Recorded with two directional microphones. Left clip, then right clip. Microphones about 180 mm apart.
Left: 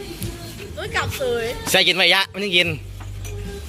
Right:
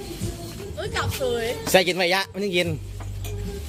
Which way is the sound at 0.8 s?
30° left (ahead or behind).